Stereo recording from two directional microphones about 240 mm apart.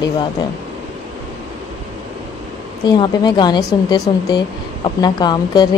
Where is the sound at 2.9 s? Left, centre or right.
Centre.